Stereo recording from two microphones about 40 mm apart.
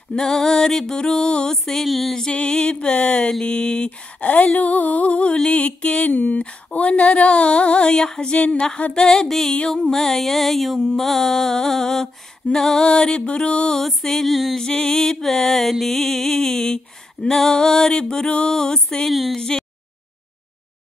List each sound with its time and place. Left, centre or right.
0.1 s a sound: centre
1.6 s music: centre
2.3 s mantra: left
4.2 s speech: left
5.4 s mantra: left
6.0 s speech: left
6.8 s mantra: left
8.9 s a sound: centre
12.8 s mantra: left
13.7 s music: centre
14.6 s a sound: centre
19.0 s music: centre
19.3 s a sound: centre